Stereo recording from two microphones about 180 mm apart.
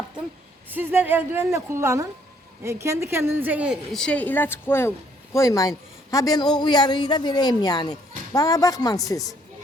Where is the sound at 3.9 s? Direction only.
5° left (ahead or behind).